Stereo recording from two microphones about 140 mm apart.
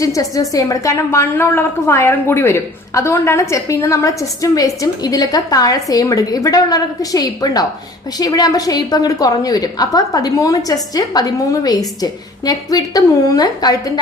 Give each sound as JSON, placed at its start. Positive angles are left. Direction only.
{"t": 0.0, "sound": "a woman's voice", "side_deg": 25}